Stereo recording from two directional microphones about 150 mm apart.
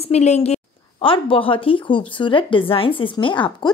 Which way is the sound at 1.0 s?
35° left (ahead or behind).